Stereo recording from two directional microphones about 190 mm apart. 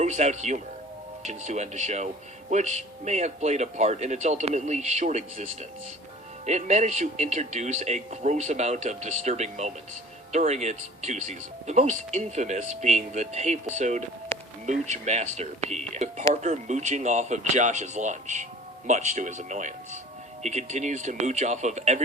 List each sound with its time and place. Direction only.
0.0 s speech: 35° right (ahead or behind)
14.3 s music: 10° left (ahead or behind)
14.7 s speech: 40° right (ahead or behind)